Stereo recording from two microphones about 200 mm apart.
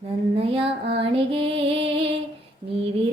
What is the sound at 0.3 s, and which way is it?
Music, 30° right (ahead or behind).